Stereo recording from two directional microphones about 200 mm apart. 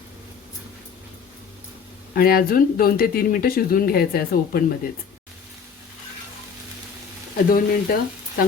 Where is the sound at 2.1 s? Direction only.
45° left (ahead or behind).